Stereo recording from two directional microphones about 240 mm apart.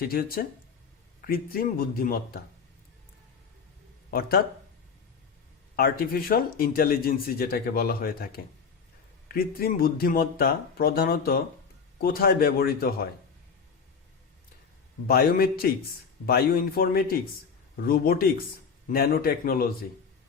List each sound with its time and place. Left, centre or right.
0.1 s speech: left
4.1 s speech: left
5.7 s speech: left
9.3 s speech: left
15.0 s speech: left